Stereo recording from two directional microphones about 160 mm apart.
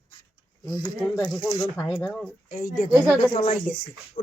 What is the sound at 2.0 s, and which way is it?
Speech, centre (ahead or behind).